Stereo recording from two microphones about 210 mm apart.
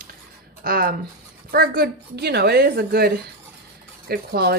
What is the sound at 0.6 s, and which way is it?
A woman's voice, 45° right (ahead or behind).